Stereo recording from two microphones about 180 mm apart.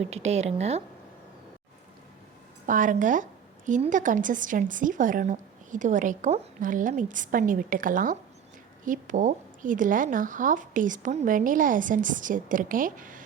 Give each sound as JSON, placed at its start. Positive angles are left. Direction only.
{"t": 0.0, "sound": "speech", "side_deg": -35}
{"t": 2.6, "sound": "a woman's voice", "side_deg": -45}